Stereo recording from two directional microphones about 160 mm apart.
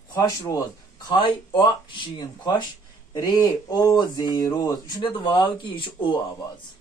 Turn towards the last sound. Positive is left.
turn(degrees=30)  # may be behind; listen again after turning